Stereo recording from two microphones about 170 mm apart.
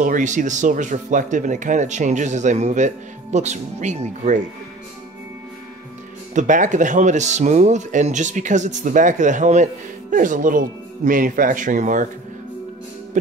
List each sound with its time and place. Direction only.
0.0 s speech: 50° right (ahead or behind)
6.3 s speech: 50° right (ahead or behind)